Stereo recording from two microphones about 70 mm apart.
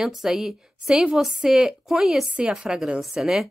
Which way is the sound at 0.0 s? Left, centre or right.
Centre.